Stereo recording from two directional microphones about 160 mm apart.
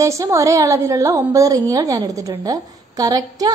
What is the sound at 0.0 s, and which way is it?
A woman's voice, 20° right (ahead or behind).